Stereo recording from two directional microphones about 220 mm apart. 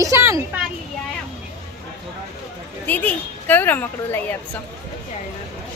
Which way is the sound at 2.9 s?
5° left (ahead or behind).